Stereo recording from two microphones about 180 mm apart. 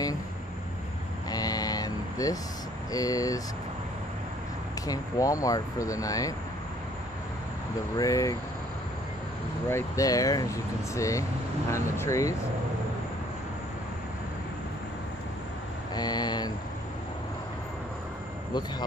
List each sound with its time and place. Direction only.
1.3 s vehicle: 20° left (ahead or behind)
2.9 s speech: 20° left (ahead or behind)
4.8 s speech: 20° left (ahead or behind)
8.0 s speech: 20° left (ahead or behind)
9.7 s speech: 15° left (ahead or behind)
15.9 s mantra: 20° left (ahead or behind)